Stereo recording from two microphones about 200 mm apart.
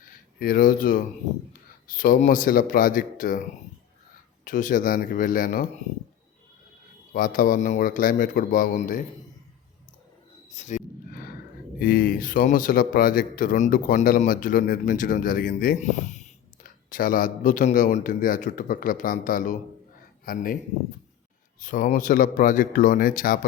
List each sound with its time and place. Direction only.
0.3 s speech: 45° left (ahead or behind)
4.4 s speech: 40° left (ahead or behind)
7.1 s speech: 45° left (ahead or behind)
10.5 s a sound: 35° left (ahead or behind)
11.8 s speech: 45° left (ahead or behind)
21.6 s speech: 40° left (ahead or behind)